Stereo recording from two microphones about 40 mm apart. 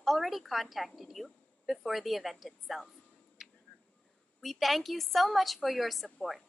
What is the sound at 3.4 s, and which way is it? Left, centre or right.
Finger snapping, centre.